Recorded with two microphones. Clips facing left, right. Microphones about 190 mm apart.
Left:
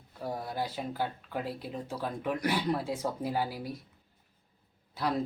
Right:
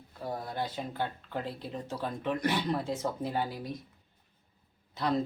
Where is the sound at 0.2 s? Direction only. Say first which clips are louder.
Even; 10° left (ahead or behind).